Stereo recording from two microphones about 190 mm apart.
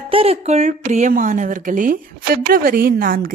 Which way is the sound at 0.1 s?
30° right (ahead or behind).